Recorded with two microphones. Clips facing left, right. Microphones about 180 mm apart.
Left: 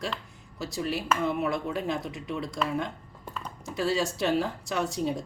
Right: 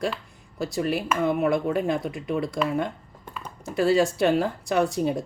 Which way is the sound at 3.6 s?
55° right (ahead or behind).